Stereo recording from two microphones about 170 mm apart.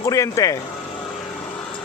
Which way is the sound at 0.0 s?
20° left (ahead or behind).